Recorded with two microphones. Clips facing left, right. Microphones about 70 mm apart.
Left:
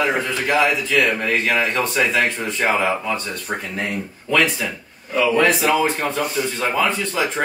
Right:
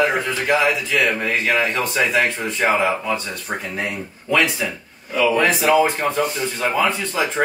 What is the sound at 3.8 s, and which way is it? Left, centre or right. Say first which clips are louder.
Speech: left 1 dB; centre.